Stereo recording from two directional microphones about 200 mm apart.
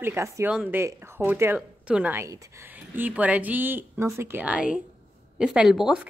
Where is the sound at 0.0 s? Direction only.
10° right (ahead or behind).